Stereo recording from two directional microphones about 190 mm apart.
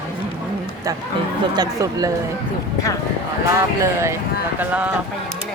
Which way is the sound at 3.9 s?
15° right (ahead or behind).